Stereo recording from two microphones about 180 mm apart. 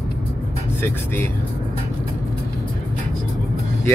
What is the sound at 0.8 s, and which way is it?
Speech, 10° left (ahead or behind).